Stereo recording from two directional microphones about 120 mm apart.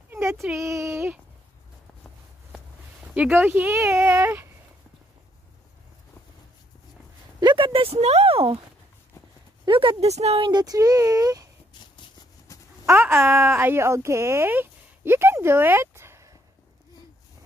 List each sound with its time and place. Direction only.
0.1 s child singing: 20° right (ahead or behind)
0.6 s speech: 25° right (ahead or behind)
2.5 s speech: 10° right (ahead or behind)
7.3 s speech: 40° right (ahead or behind)
9.7 s speech: 45° right (ahead or behind); by 10.4 s 65° right (ahead or behind)
10.4 s speech: 35° right (ahead or behind)
12.5 s a sound: 25° left (ahead or behind)
12.8 s speech: 20° right (ahead or behind)